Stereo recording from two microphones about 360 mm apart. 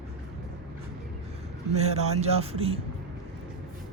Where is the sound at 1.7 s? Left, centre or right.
Centre.